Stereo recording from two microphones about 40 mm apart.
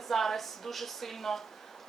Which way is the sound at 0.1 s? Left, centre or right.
Centre.